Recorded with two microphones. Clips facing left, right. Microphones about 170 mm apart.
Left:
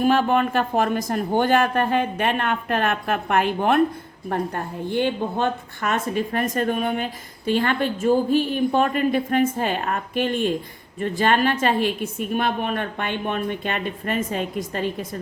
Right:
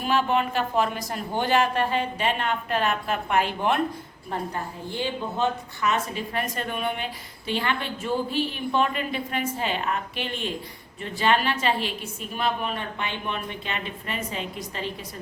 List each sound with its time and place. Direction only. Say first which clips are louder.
0.0 s a woman's voice: left 5 dB; 50° left (ahead or behind)